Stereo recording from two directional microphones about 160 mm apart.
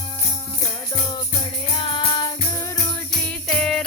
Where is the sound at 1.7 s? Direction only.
30° left (ahead or behind).